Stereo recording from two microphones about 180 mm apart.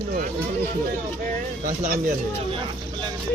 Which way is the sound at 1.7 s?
45° right (ahead or behind).